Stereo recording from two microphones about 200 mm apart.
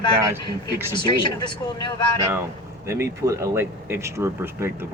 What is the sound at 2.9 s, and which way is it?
Speech, 15° right (ahead or behind).